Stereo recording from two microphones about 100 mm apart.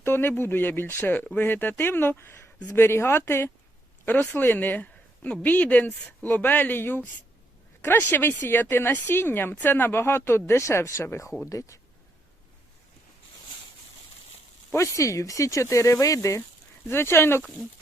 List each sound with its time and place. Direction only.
0.0 s speech: 25° left (ahead or behind)
14.7 s speech: 30° left (ahead or behind)